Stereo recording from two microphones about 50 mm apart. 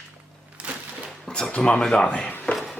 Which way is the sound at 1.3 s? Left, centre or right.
Centre.